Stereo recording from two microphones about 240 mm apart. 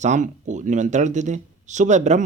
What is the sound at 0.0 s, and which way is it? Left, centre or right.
Speech, right.